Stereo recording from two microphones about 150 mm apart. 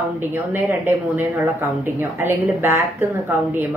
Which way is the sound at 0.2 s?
15° right (ahead or behind).